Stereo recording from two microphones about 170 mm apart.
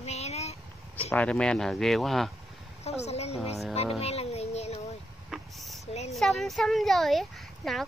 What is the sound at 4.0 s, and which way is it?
Music, 40° left (ahead or behind).